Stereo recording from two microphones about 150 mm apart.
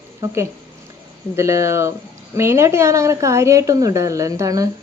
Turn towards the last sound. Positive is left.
turn(degrees=-25)  # may be behind; listen again after turning